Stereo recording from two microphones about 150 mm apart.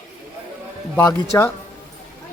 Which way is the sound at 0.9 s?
15° left (ahead or behind).